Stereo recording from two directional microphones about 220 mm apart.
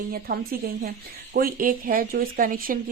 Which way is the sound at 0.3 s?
40° right (ahead or behind).